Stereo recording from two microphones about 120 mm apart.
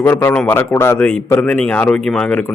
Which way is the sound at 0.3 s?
15° left (ahead or behind).